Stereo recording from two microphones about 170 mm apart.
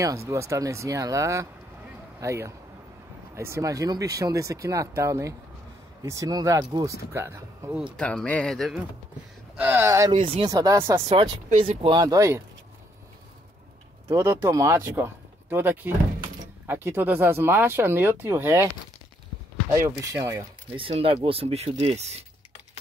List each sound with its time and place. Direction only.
0.0 s speech: 20° right (ahead or behind)
7.7 s speech: 5° right (ahead or behind)
8.0 s speech: 5° left (ahead or behind)
9.6 s speech: 10° right (ahead or behind)
10.2 s speech: 25° right (ahead or behind)
11.6 s speech: 35° right (ahead or behind)
12.0 s speech: 20° right (ahead or behind)
14.0 s speech: 15° right (ahead or behind)
19.7 s speech: 15° right (ahead or behind)
20.7 s speech: 30° right (ahead or behind)